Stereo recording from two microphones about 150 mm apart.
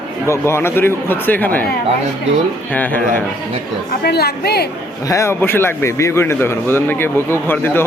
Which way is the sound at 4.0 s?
90° left.